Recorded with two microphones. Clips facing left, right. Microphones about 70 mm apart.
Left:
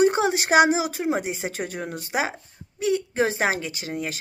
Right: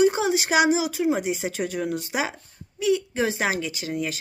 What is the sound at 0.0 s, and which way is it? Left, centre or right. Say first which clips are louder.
Speech: even; left.